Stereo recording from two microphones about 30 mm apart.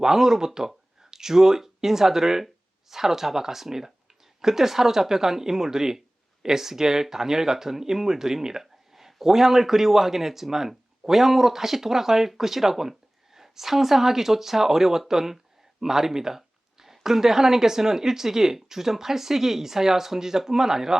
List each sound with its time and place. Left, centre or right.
0.0 s speech: centre